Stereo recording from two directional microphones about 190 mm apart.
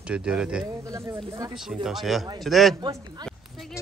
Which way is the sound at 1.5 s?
Centre (ahead or behind).